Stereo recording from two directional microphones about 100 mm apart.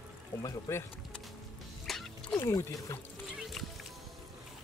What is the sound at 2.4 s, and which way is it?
Speech, 30° left (ahead or behind).